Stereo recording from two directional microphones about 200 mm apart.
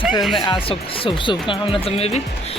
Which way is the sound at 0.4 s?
25° left (ahead or behind).